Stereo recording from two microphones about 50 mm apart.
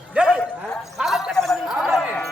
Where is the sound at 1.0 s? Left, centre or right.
Centre.